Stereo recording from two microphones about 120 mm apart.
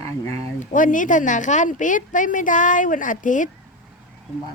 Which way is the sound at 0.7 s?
90° left.